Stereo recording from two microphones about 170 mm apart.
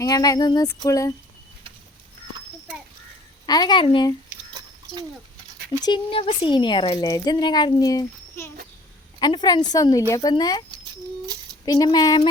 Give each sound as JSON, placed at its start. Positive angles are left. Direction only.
{"t": 0.0, "sound": "speech", "side_deg": 20}
{"t": 3.4, "sound": "speech", "side_deg": 25}
{"t": 5.8, "sound": "speech", "side_deg": 30}
{"t": 11.6, "sound": "speech", "side_deg": 20}